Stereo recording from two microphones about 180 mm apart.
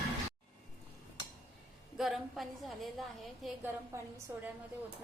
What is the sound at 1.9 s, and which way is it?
A woman's voice, centre (ahead or behind).